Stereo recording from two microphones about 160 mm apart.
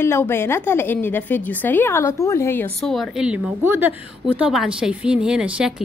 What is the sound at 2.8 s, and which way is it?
Speech, centre (ahead or behind).